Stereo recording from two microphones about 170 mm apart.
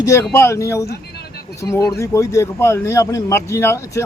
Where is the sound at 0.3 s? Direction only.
15° left (ahead or behind).